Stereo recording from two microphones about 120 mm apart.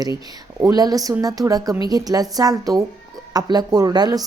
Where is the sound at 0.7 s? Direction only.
35° right (ahead or behind).